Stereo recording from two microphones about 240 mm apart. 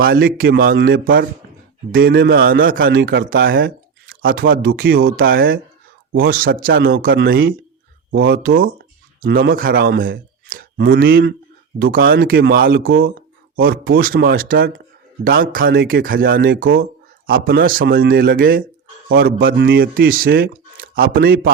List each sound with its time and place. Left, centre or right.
0.0 s a man's voice: right